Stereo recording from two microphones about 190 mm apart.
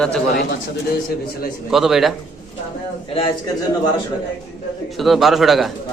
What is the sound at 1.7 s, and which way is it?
Speech, centre (ahead or behind).